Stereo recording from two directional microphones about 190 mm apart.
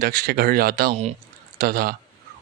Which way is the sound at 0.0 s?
50° right (ahead or behind).